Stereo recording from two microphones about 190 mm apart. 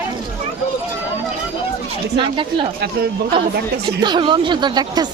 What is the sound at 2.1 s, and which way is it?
Speech, 25° right (ahead or behind).